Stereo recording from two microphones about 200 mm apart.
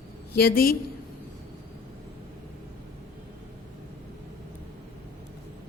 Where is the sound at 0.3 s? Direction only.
50° left (ahead or behind).